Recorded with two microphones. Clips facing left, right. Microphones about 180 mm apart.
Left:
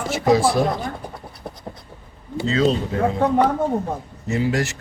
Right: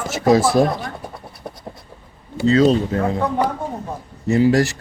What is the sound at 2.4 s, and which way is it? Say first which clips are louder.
Speech: right 5 dB; 40° right (ahead or behind).